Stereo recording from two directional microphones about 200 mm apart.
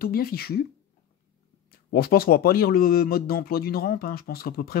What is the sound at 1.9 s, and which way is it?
Speech, 50° left (ahead or behind).